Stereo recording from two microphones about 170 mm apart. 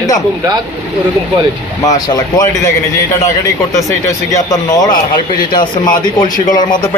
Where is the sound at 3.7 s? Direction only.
20° left (ahead or behind).